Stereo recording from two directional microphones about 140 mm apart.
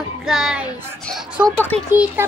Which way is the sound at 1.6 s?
15° left (ahead or behind).